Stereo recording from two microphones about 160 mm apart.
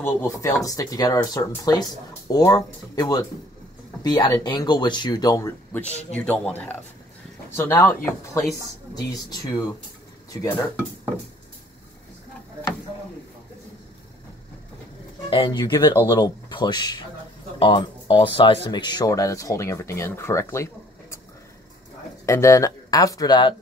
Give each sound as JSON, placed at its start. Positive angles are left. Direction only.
{"t": 0.0, "sound": "speech", "side_deg": 20}
{"t": 5.7, "sound": "speech", "side_deg": 10}
{"t": 15.2, "sound": "speech", "side_deg": 30}
{"t": 22.2, "sound": "speech", "side_deg": 20}